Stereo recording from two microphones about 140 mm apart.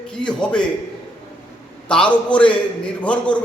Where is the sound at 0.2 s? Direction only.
5° left (ahead or behind).